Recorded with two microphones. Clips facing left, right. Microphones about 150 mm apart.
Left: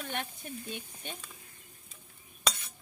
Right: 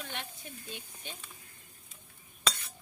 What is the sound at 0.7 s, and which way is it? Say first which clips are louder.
Speech: left 4 dB; 55° left (ahead or behind).